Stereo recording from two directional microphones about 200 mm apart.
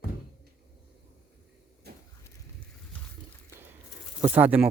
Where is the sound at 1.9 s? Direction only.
55° right (ahead or behind).